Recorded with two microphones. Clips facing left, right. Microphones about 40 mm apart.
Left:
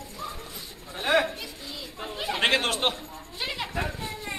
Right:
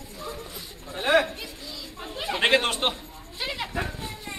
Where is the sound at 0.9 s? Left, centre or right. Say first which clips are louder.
Right 2 dB; centre.